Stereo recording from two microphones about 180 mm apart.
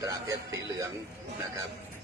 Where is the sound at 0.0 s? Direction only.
20° right (ahead or behind).